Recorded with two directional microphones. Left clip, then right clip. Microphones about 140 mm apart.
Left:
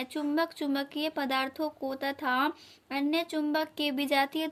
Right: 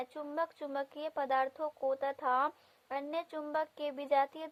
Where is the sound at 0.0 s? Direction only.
40° right (ahead or behind).